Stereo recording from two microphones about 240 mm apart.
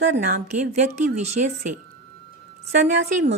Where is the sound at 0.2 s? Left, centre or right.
Right.